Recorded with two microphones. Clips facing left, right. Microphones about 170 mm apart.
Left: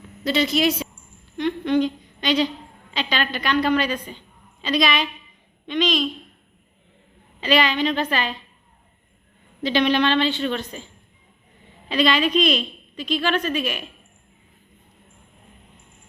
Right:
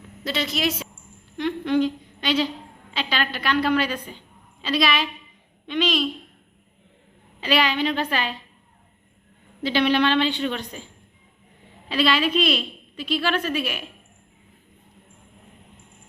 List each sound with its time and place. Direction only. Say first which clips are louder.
0.3 s a woman's voice: left 5 dB; centre (ahead or behind)
1.4 s humming: left 1 dB; 5° right (ahead or behind)
2.9 s a woman's voice: left 2 dB; 5° right (ahead or behind)
7.4 s a woman's voice: left 2 dB; 10° right (ahead or behind)
9.6 s a woman's voice: left 1 dB; 10° right (ahead or behind)
11.9 s a woman's voice: left 2 dB; 5° right (ahead or behind)